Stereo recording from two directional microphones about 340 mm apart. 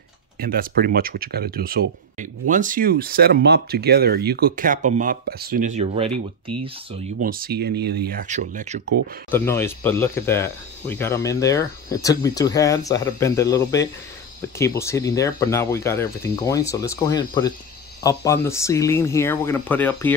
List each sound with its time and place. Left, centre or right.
0.4 s speech: right
7.2 s speech: right
9.3 s speech: centre